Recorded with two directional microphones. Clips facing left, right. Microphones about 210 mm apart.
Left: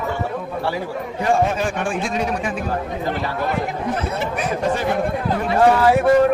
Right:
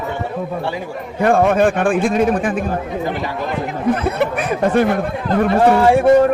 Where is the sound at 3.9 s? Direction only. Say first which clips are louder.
Right 5 dB; 60° right (ahead or behind).